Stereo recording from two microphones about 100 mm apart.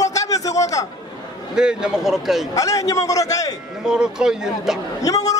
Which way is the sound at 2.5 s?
35° left (ahead or behind).